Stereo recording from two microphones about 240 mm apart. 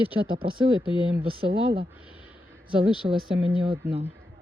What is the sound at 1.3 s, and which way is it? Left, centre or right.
Speech, right.